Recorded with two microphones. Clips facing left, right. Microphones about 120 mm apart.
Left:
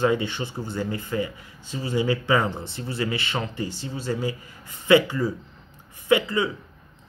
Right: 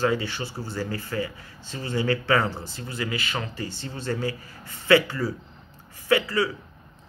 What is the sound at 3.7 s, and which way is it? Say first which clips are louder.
Speech: left 1 dB; 10° left (ahead or behind).